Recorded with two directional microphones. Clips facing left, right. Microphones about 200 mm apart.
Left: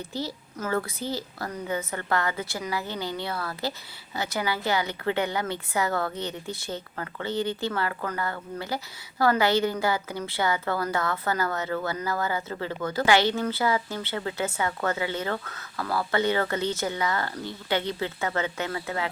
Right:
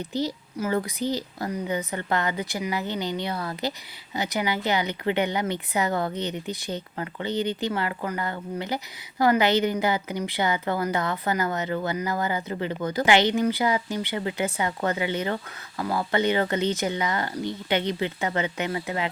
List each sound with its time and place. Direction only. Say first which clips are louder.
0.1 s a woman's voice: right 5 dB; 20° right (ahead or behind)